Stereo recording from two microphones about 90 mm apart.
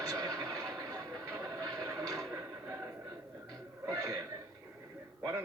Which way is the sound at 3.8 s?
40° right (ahead or behind).